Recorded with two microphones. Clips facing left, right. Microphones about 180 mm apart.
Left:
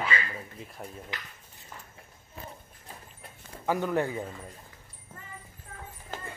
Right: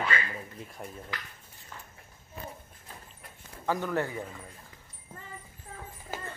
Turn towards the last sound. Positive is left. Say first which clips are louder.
# right 1 dB
turn(degrees=-5)  # may be behind; listen again after turning